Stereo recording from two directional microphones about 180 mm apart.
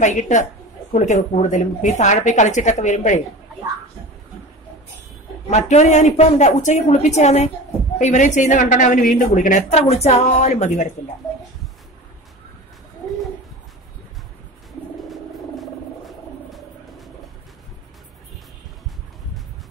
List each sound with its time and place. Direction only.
0.0 s a woman's voice: 40° left (ahead or behind)
5.5 s a woman's voice: 40° left (ahead or behind)
15.0 s a sound: centre (ahead or behind)